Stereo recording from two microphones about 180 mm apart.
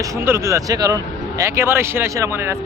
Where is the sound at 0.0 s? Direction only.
15° right (ahead or behind).